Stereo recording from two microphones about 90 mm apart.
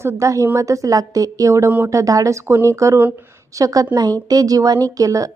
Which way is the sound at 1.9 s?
40° right (ahead or behind).